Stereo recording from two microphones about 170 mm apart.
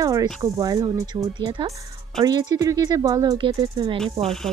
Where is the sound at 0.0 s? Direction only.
20° right (ahead or behind).